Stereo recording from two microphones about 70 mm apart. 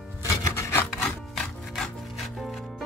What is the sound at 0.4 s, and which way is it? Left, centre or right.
Rub, left.